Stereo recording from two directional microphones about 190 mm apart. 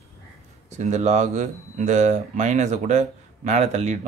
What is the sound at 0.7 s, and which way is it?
Speech, 40° right (ahead or behind).